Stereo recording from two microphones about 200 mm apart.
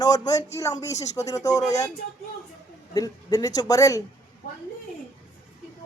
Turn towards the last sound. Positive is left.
turn(degrees=15)  # may be behind; listen again after turning